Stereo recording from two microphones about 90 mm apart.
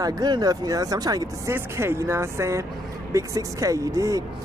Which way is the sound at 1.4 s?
30° right (ahead or behind).